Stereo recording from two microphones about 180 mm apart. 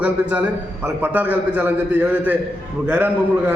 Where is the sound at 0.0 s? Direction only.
10° right (ahead or behind).